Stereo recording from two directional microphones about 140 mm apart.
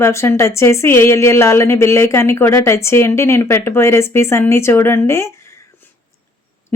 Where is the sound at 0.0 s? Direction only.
20° left (ahead or behind).